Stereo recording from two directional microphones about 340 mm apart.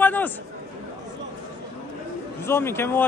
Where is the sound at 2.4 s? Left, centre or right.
Centre.